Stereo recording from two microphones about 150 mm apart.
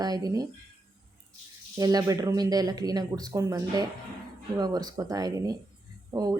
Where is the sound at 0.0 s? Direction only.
25° right (ahead or behind).